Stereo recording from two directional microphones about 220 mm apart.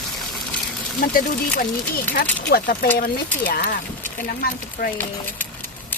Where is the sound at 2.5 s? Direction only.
40° left (ahead or behind).